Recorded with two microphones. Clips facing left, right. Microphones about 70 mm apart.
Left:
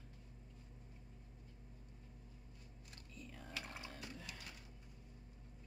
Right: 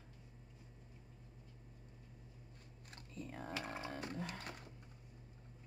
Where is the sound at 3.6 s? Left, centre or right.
Right.